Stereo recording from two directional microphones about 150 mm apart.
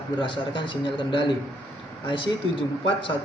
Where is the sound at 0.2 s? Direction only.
35° left (ahead or behind).